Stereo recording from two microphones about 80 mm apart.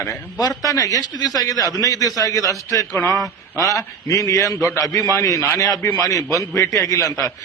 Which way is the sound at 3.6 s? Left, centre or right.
Left.